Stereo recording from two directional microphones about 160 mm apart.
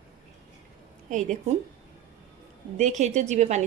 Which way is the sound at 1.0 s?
50° right (ahead or behind).